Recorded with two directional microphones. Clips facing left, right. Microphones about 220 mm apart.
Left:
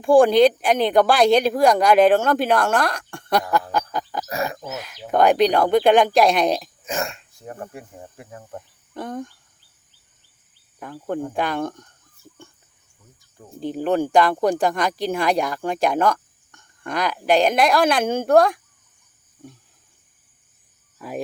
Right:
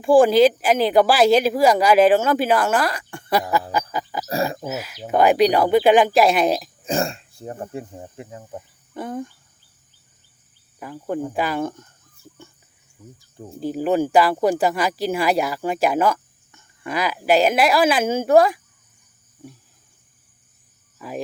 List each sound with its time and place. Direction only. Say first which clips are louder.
0.0 s speech: even; centre (ahead or behind)
3.7 s music: even; 5° right (ahead or behind)
4.6 s speech: right 4 dB; 5° right (ahead or behind)
6.8 s speech: right 4 dB; 30° right (ahead or behind)
8.4 s speech: right 1 dB; 5° right (ahead or behind)
10.8 s speech: right 1 dB; 5° right (ahead or behind)
13.6 s speech: right 1 dB; 5° right (ahead or behind)
21.0 s speech: even; centre (ahead or behind)